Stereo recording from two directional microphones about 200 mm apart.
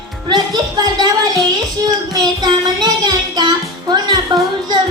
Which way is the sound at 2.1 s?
20° right (ahead or behind).